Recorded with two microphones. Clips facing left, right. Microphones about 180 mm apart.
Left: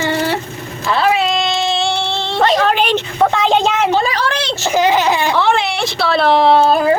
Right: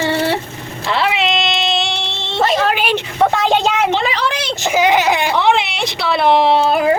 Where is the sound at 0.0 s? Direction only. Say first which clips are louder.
Even; 30° right (ahead or behind).